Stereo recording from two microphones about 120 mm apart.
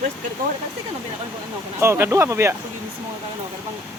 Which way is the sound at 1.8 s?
20° right (ahead or behind).